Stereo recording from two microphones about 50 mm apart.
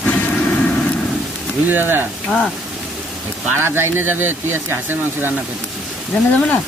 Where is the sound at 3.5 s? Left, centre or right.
Right.